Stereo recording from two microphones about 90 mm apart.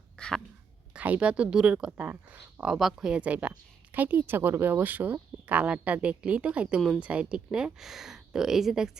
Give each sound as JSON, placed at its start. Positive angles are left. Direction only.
{"t": 0.2, "sound": "a sound", "side_deg": 10}
{"t": 0.9, "sound": "speech", "side_deg": -15}
{"t": 2.7, "sound": "speech", "side_deg": -5}